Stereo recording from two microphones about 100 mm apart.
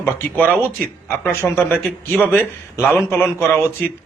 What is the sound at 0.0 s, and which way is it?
A man's voice, 20° left (ahead or behind).